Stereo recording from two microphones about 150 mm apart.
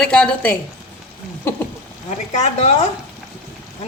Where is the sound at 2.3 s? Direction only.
45° left (ahead or behind).